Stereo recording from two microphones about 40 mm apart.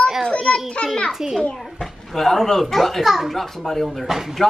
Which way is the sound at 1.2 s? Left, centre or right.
Centre.